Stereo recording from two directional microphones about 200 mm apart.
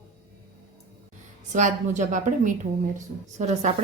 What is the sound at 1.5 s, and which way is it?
Speech, 40° right (ahead or behind).